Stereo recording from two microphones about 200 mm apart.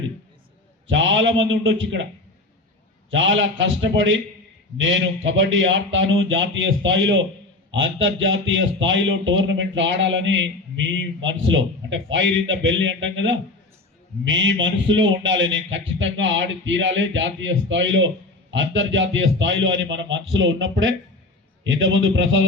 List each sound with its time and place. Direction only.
0.9 s a man's voice: 75° right (ahead or behind)
3.1 s a man's voice: 70° right (ahead or behind)